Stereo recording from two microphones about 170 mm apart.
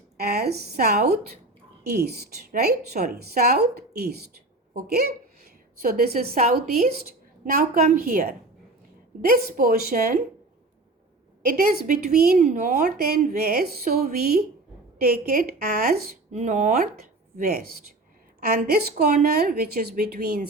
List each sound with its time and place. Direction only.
0.2 s a woman's voice: 70° right (ahead or behind)
7.7 s speech: 55° right (ahead or behind)
11.4 s speech: 65° right (ahead or behind)
12.4 s speech: 45° right (ahead or behind)
12.8 s speech: 65° right (ahead or behind)
16.3 s a woman's voice: 45° right (ahead or behind); by 20.4 s 60° right (ahead or behind)